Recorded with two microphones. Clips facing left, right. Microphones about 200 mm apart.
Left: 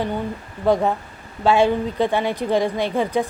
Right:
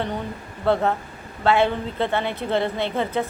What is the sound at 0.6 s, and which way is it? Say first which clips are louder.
A woman's voice: left 2 dB; 15° left (ahead or behind).